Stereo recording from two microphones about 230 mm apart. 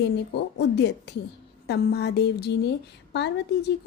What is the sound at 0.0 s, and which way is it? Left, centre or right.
A woman's voice, left.